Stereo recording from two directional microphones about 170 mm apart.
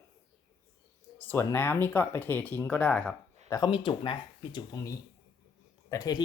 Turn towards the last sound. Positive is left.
turn(degrees=20)  # may be behind; listen again after turning